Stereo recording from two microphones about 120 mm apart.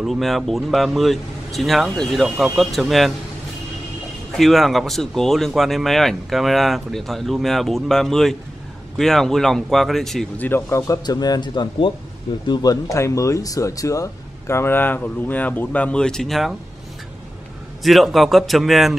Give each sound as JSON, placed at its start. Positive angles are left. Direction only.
{"t": 0.0, "sound": "speech", "side_deg": 0}
{"t": 4.3, "sound": "speech", "side_deg": 0}
{"t": 10.3, "sound": "speech", "side_deg": 15}
{"t": 17.8, "sound": "speech", "side_deg": 0}